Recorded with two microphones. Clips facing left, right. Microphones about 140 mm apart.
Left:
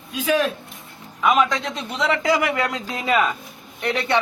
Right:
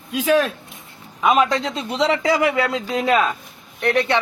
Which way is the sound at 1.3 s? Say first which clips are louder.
Right 2 dB; 30° right (ahead or behind).